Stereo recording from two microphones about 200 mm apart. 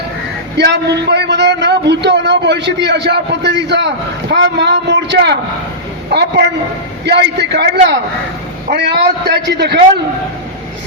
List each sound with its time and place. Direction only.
0.5 s a man's voice: 60° right (ahead or behind)